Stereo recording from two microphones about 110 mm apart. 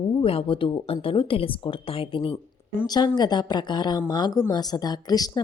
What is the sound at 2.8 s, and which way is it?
Speech, 40° left (ahead or behind).